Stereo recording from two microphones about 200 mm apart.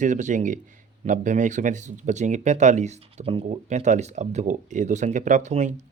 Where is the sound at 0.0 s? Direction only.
40° right (ahead or behind).